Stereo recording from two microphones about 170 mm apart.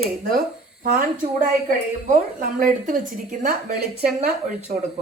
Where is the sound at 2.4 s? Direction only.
55° right (ahead or behind).